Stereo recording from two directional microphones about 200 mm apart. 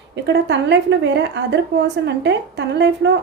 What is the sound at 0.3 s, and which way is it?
A woman's voice, 60° right (ahead or behind).